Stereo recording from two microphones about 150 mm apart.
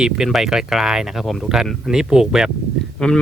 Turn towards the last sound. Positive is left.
turn(degrees=5)  # may be behind; listen again after turning